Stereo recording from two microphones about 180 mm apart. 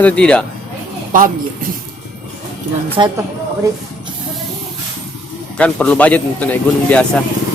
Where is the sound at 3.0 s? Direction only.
25° right (ahead or behind).